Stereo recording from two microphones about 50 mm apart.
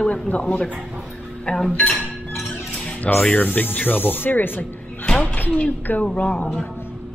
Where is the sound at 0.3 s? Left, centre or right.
Left.